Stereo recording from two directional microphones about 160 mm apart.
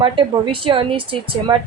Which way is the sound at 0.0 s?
35° right (ahead or behind).